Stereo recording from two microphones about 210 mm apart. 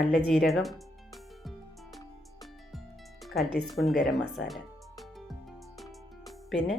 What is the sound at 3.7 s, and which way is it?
Speech, centre (ahead or behind).